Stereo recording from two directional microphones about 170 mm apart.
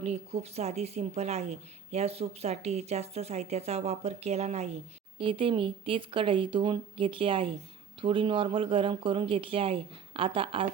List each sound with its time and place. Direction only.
0.0 s speech: 40° right (ahead or behind)